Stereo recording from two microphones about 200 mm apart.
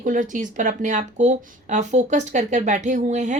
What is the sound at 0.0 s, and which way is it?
Speech, 40° right (ahead or behind).